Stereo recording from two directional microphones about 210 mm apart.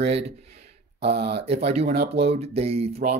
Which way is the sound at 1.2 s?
30° right (ahead or behind).